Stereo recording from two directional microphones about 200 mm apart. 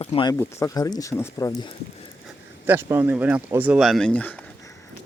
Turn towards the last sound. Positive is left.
turn(degrees=5)  # may be behind; listen again after turning